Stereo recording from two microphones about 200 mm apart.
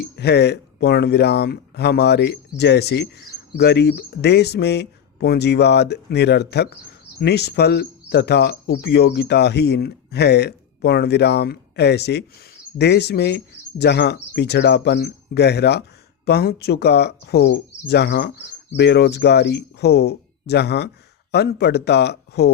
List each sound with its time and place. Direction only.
0.0 s speech: 55° left (ahead or behind)